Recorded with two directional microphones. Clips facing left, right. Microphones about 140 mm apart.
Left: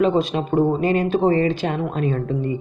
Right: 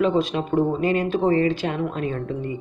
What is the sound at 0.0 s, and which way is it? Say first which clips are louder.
Speech: left 2 dB; 35° left (ahead or behind).